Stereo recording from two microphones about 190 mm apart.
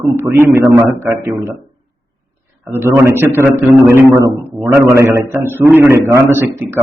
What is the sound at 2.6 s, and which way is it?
A man's voice, 10° right (ahead or behind).